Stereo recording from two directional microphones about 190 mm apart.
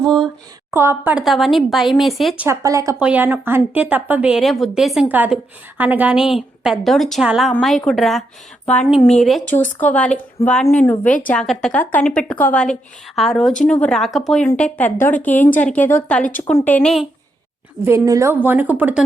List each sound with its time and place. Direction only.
0.0 s a sound: centre (ahead or behind)
0.7 s speech: 15° right (ahead or behind)
2.5 s speech: 15° right (ahead or behind); by 17.1 s centre (ahead or behind)
17.8 s speech: 15° right (ahead or behind)